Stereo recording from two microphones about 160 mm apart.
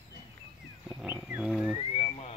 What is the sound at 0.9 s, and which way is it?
Wild animals, 5° right (ahead or behind).